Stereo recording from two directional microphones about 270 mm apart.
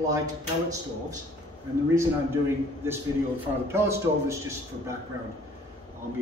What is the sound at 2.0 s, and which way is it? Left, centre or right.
Speech, centre.